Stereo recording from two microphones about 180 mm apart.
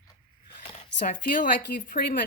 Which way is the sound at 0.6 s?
35° left (ahead or behind).